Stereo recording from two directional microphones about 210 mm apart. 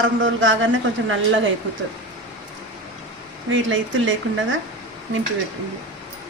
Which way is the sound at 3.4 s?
65° right (ahead or behind).